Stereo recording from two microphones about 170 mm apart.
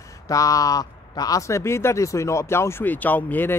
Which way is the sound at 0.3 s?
20° left (ahead or behind).